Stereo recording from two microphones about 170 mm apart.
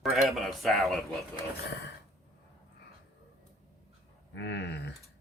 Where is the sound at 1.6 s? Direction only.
90° left.